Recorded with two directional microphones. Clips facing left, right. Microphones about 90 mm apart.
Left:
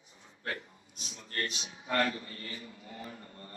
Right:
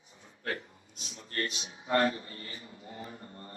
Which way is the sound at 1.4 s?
30° right (ahead or behind).